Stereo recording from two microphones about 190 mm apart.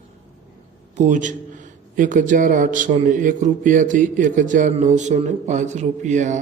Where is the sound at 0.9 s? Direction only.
40° right (ahead or behind).